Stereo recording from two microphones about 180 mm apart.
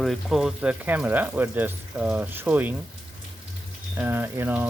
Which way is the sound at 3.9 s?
10° right (ahead or behind).